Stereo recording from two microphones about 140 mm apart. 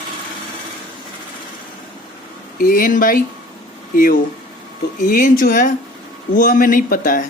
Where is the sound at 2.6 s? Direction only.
85° left.